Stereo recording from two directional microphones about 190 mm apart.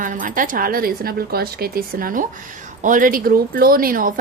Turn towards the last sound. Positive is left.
turn(degrees=-50)  # may be behind; listen again after turning